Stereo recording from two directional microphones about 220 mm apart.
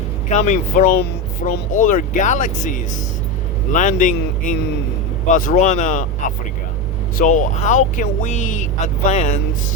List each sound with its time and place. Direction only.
0.3 s speech: 30° left (ahead or behind)